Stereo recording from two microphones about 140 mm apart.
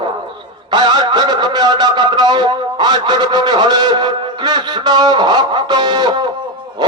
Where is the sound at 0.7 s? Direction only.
30° right (ahead or behind).